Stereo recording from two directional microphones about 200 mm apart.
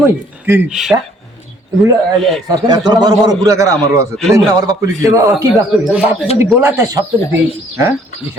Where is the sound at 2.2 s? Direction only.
Centre (ahead or behind).